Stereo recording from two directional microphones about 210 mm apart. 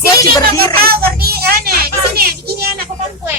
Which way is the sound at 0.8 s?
45° right (ahead or behind).